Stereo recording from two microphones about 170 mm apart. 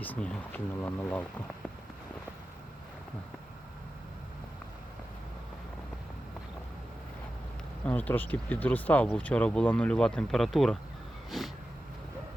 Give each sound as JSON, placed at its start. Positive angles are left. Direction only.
{"t": 0.0, "sound": "speech", "side_deg": 10}
{"t": 7.9, "sound": "speech", "side_deg": 10}
{"t": 11.3, "sound": "a sound", "side_deg": 0}